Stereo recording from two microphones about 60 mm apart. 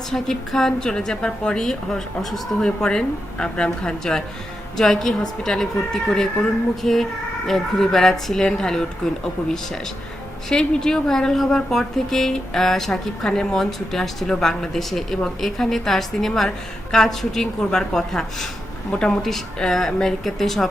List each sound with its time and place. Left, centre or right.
0.1 s a woman's voice: centre
10.5 s a woman's voice: centre